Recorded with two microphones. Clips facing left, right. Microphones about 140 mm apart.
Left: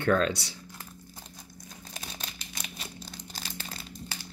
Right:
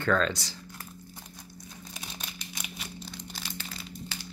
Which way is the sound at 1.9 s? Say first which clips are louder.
Left 2 dB; 35° left (ahead or behind).